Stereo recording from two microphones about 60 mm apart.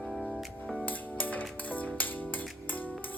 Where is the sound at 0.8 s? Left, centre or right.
Left.